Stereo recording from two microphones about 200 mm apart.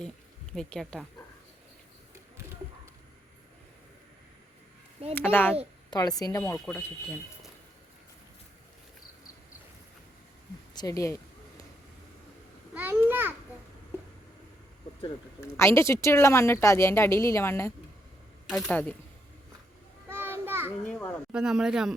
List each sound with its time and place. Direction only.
0.5 s speech: 5° left (ahead or behind)
5.1 s a woman's voice: 10° left (ahead or behind)
6.5 s speech: 10° left (ahead or behind)
10.8 s speech: 15° left (ahead or behind)
12.7 s a sound: 10° right (ahead or behind)
15.4 s speech: 10° left (ahead or behind)
18.4 s speech: centre (ahead or behind)
20.1 s a sound: 10° right (ahead or behind)
20.8 s speech: 5° left (ahead or behind)